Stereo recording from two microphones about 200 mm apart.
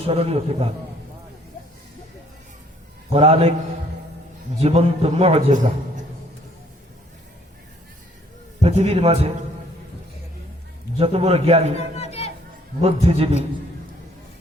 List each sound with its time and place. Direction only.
0.1 s a man's voice: 30° right (ahead or behind)
3.1 s a man's voice: 30° right (ahead or behind)
4.6 s a man's voice: 30° right (ahead or behind)
8.6 s a man's voice: 30° right (ahead or behind)
10.9 s a man's voice: 30° right (ahead or behind)
11.9 s music: 30° left (ahead or behind)
12.8 s a man's voice: 30° right (ahead or behind)